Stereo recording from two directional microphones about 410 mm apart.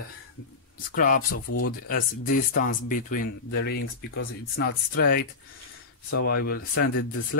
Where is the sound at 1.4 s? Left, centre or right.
Left.